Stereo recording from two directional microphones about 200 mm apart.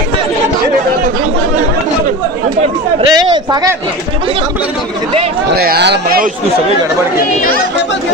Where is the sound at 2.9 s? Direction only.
20° right (ahead or behind).